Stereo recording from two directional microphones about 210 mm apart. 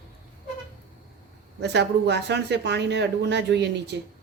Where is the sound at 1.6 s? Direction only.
55° right (ahead or behind).